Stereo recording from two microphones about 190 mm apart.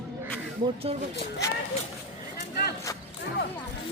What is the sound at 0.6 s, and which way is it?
Speech, 30° right (ahead or behind).